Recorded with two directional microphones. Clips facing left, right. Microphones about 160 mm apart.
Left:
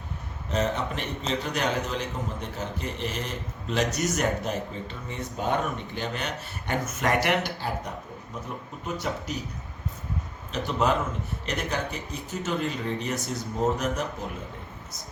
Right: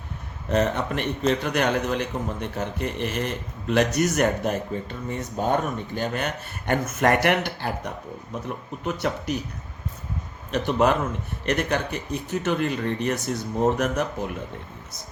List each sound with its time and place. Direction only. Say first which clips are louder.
0.4 s a man's voice: right 4 dB; 60° right (ahead or behind)
8.8 s speech: right 4 dB; 65° right (ahead or behind)
10.5 s a man's voice: right 4 dB; 60° right (ahead or behind)